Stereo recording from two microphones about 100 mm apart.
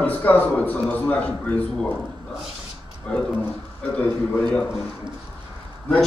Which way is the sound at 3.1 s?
10° left (ahead or behind).